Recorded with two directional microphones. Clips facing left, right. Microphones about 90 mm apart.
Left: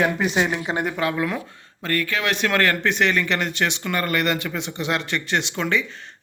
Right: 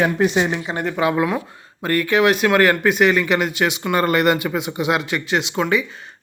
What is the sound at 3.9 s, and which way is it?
Speech, 20° right (ahead or behind).